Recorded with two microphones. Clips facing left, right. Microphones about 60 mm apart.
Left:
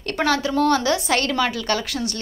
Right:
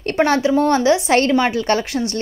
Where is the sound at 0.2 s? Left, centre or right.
Right.